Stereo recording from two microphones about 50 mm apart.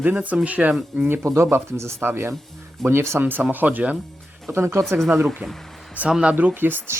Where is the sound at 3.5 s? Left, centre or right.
Right.